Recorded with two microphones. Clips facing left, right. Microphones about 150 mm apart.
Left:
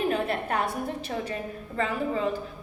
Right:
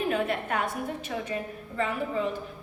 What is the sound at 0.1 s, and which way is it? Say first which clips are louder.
A woman's voice: left 1 dB; 35° left (ahead or behind).